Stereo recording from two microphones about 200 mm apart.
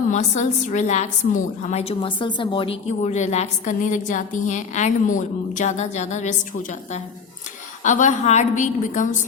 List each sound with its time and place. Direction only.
0.1 s a woman's voice: 35° left (ahead or behind)
7.9 s a woman's voice: 35° left (ahead or behind)